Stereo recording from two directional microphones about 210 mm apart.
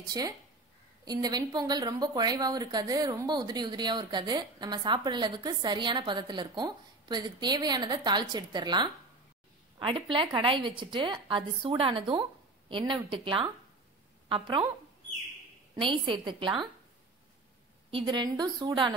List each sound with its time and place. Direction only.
1.0 s a woman's voice: 20° right (ahead or behind)
15.7 s a woman's voice: 25° right (ahead or behind)
17.9 s a woman's voice: 20° right (ahead or behind)